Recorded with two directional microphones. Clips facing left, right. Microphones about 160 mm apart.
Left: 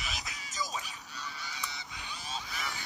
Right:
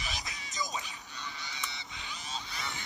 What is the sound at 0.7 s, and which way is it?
Music, 20° right (ahead or behind).